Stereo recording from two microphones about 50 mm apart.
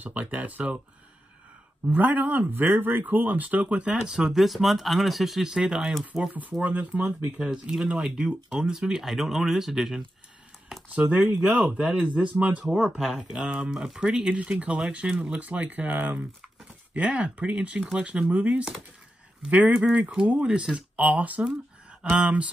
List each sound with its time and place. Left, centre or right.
0.0 s speech: right
1.9 s speech: right
4.0 s speech: centre
6.6 s speech: right
7.3 s speech: centre
11.4 s speech: right
12.6 s speech: centre